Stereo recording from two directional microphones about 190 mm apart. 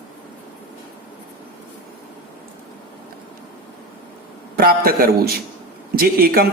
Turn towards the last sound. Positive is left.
turn(degrees=-50)  # may be behind; listen again after turning